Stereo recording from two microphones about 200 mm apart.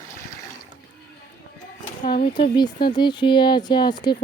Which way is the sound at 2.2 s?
25° left (ahead or behind).